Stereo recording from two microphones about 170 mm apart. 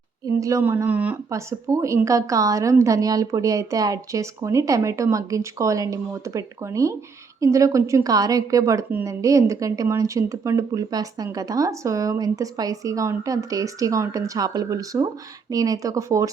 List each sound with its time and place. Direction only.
0.3 s a woman's voice: 20° right (ahead or behind)